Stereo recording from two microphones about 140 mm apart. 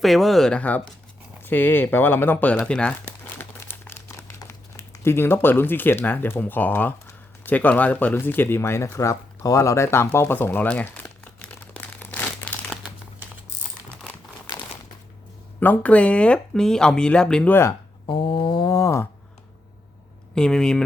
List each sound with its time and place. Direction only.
0.0 s speech: centre (ahead or behind)
11.3 s crumpling: 10° left (ahead or behind)
15.6 s speech: 10° left (ahead or behind)
18.0 s a sound: 40° left (ahead or behind); by 19.0 s 20° left (ahead or behind)
20.3 s speech: 5° left (ahead or behind)